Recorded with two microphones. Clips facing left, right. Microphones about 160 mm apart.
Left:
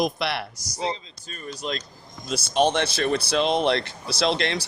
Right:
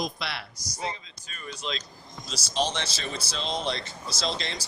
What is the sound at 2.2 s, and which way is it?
A man's voice, 55° left (ahead or behind).